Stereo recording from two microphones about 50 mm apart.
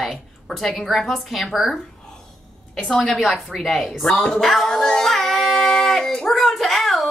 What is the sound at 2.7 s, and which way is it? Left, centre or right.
Speech, centre.